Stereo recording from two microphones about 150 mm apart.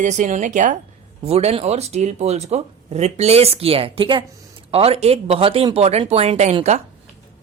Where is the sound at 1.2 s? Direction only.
45° right (ahead or behind).